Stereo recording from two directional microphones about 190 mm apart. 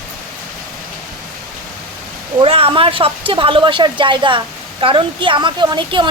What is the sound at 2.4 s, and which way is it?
Speech, 30° right (ahead or behind).